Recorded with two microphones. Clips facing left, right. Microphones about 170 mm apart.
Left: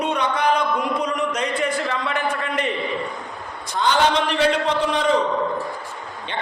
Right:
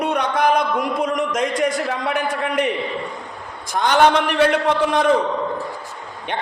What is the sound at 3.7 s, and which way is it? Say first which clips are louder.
A man's voice: right 4 dB; 55° right (ahead or behind).